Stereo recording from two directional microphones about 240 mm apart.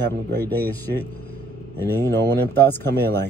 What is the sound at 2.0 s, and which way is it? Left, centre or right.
Speech, centre.